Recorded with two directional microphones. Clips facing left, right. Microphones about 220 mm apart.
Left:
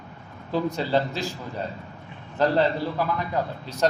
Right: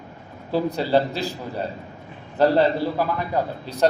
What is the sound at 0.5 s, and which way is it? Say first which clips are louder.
A man's voice: right 3 dB; 35° right (ahead or behind).